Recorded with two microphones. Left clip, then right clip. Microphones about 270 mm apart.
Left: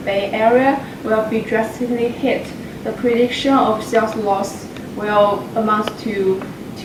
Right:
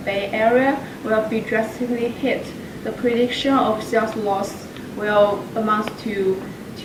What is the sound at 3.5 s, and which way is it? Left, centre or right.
Speech, centre.